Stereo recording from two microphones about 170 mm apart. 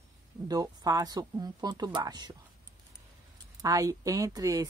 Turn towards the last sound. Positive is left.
turn(degrees=-20)  # may be behind; listen again after turning